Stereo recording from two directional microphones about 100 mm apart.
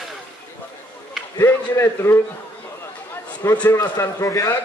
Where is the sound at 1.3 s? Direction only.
25° left (ahead or behind).